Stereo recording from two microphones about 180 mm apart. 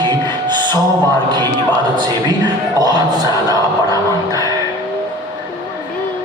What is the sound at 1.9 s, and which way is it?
Speech, 25° right (ahead or behind).